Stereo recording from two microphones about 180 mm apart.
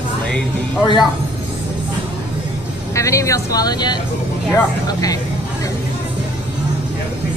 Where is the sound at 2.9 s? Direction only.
15° left (ahead or behind).